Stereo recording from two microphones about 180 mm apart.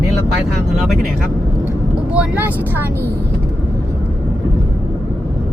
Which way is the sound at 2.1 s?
10° right (ahead or behind).